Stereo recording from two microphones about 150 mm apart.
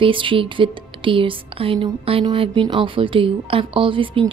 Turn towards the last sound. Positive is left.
turn(degrees=-35)  # may be behind; listen again after turning